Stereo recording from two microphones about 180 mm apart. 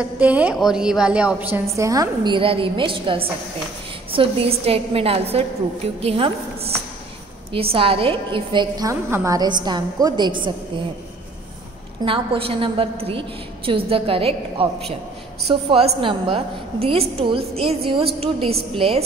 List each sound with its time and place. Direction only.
0.0 s a woman's voice: 10° right (ahead or behind); by 10.5 s 25° right (ahead or behind)
12.0 s a woman's voice: 30° right (ahead or behind)